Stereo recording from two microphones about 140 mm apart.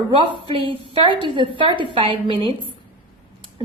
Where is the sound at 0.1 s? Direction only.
35° right (ahead or behind).